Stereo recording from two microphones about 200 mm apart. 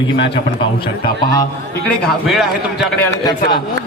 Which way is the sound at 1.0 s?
15° left (ahead or behind).